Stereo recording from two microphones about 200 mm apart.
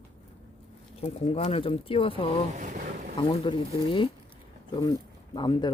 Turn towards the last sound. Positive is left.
turn(degrees=20)  # may be behind; listen again after turning